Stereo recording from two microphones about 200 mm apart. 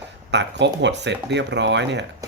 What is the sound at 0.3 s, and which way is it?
Speech, 60° right (ahead or behind).